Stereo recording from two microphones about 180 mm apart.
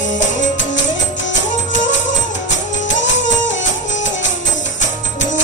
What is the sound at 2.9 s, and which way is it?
Music, 90° left.